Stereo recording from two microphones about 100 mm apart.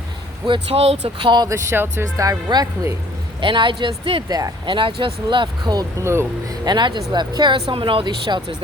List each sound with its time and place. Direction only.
0.4 s speech: 65° right (ahead or behind); by 1.3 s 80° right
1.5 s speech: 25° right (ahead or behind)
2.5 s a woman's voice: 50° right (ahead or behind)
4.3 s speech: 40° right (ahead or behind)
4.6 s speech: 55° right (ahead or behind)
6.0 s speech: 30° right (ahead or behind)
6.7 s a woman's voice: 50° right (ahead or behind)
7.6 s speech: 60° right (ahead or behind)
8.3 s a woman's voice: 45° right (ahead or behind)